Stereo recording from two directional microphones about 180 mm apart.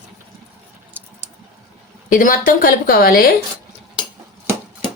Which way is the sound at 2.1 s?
50° left (ahead or behind).